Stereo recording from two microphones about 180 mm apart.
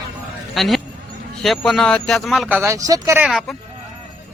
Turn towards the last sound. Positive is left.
turn(degrees=0)  # may be behind; listen again after turning